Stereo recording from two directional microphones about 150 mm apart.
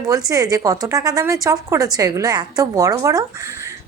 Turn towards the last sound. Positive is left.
turn(degrees=-20)  # may be behind; listen again after turning